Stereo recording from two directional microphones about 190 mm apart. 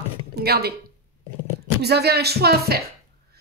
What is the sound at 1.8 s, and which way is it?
Speech, 60° right (ahead or behind).